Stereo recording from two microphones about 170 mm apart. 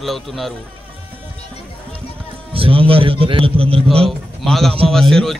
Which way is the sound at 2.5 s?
30° right (ahead or behind).